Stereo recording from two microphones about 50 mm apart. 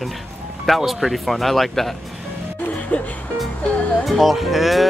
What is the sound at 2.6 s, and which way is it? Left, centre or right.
Music, left.